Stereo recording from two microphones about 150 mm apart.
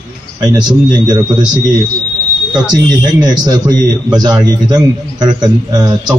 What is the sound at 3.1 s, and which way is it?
A man's voice, 25° right (ahead or behind).